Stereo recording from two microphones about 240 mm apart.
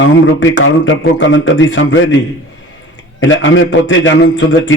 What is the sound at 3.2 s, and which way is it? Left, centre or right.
A man's voice, left.